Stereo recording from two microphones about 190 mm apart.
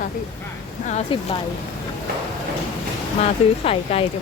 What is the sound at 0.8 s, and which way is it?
Speech, 35° left (ahead or behind).